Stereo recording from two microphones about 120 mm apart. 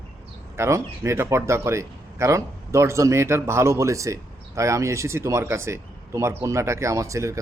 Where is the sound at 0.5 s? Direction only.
25° right (ahead or behind).